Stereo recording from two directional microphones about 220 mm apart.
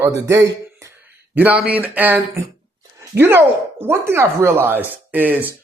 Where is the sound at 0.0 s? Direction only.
15° right (ahead or behind).